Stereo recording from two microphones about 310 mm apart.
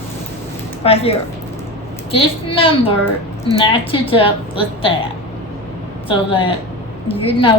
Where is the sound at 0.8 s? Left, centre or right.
Centre.